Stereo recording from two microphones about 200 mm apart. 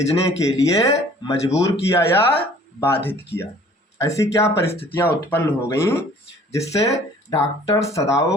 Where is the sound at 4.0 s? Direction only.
15° left (ahead or behind).